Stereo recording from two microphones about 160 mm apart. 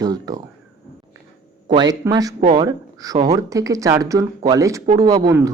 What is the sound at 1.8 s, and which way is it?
Speech, 25° right (ahead or behind).